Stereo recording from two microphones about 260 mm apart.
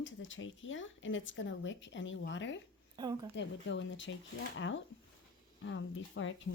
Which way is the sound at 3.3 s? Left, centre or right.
Left.